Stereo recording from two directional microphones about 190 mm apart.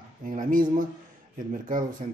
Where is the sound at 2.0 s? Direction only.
40° right (ahead or behind).